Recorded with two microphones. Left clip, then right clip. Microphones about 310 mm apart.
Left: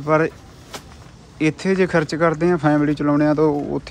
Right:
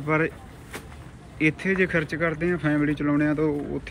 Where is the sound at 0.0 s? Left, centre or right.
Centre.